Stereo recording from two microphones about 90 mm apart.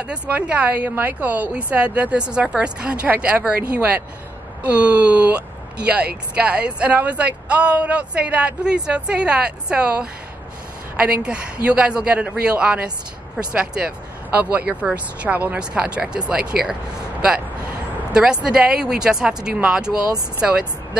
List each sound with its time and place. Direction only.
0.0 s speech: 15° right (ahead or behind)
11.2 s speech: 10° right (ahead or behind)
18.1 s speech: 10° right (ahead or behind)